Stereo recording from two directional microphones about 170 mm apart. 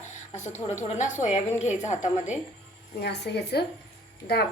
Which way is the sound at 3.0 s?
80° left.